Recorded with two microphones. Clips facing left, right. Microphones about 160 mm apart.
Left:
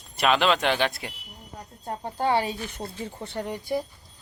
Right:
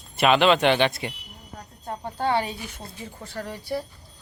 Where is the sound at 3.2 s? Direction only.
25° left (ahead or behind).